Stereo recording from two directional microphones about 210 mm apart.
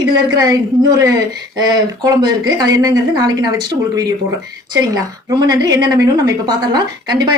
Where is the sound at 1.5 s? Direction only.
20° right (ahead or behind).